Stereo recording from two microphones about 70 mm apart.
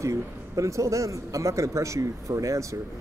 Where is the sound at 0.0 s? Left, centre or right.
Right.